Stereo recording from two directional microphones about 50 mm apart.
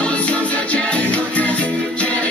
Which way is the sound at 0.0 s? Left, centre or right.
Left.